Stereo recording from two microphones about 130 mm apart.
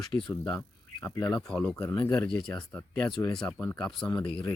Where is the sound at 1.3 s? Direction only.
5° left (ahead or behind).